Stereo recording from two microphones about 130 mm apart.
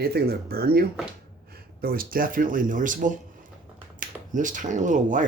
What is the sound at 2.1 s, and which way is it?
Speech, 90° right.